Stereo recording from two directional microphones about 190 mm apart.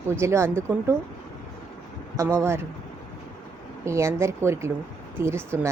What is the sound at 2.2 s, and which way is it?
Speech, 15° right (ahead or behind).